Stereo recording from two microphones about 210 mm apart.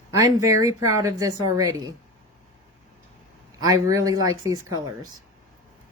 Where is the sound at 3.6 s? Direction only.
15° right (ahead or behind).